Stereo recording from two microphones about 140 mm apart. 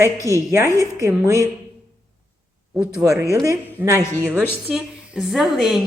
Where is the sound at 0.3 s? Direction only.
20° right (ahead or behind).